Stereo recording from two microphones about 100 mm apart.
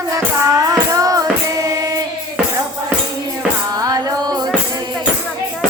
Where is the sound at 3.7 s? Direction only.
40° right (ahead or behind).